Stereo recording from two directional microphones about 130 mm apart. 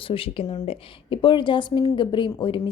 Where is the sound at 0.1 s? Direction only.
45° left (ahead or behind).